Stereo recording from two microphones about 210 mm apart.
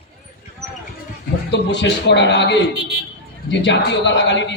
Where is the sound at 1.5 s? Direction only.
55° left (ahead or behind).